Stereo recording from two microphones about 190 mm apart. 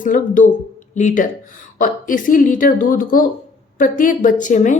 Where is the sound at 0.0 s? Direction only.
45° left (ahead or behind).